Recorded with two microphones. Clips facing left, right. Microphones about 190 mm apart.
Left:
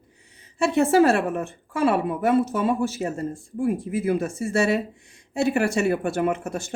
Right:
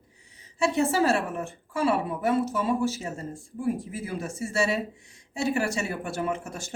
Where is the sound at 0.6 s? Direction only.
55° left (ahead or behind).